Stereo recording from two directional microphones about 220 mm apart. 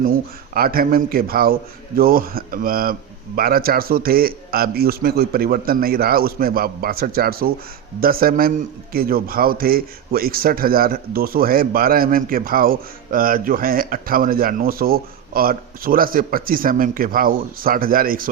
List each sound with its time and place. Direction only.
0.0 s a man's voice: 40° right (ahead or behind)